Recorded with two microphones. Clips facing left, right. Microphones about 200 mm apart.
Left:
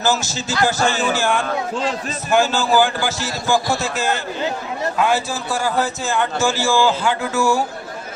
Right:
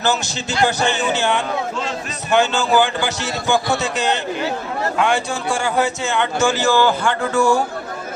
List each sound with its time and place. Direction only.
0.5 s a man's voice: 20° right (ahead or behind)
2.3 s a man's voice: 5° left (ahead or behind)
4.9 s a man's voice: 5° left (ahead or behind)
6.7 s music: 10° left (ahead or behind)